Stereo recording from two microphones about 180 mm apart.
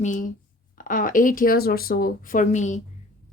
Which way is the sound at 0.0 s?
45° left (ahead or behind).